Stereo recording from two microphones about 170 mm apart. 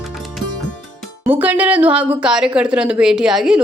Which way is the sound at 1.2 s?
10° right (ahead or behind).